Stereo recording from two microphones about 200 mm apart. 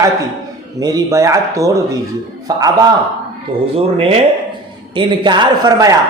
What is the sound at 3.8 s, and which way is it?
A man's voice, 30° right (ahead or behind).